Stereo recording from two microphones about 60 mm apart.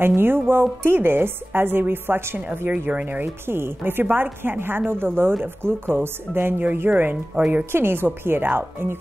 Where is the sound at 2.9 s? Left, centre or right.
Right.